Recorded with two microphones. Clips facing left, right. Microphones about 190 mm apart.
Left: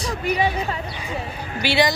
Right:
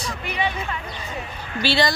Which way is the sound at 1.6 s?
15° left (ahead or behind).